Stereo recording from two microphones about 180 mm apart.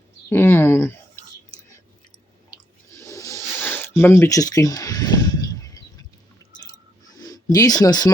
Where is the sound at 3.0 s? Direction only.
15° left (ahead or behind).